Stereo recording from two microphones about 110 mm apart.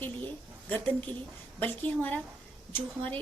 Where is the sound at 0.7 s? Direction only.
15° left (ahead or behind).